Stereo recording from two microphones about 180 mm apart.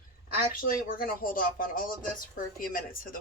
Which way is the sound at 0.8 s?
50° left (ahead or behind).